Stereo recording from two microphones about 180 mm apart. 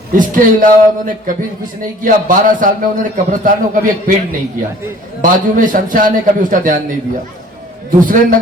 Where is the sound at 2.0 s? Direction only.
50° right (ahead or behind).